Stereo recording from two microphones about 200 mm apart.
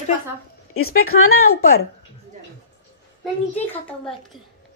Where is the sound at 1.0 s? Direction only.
90° left.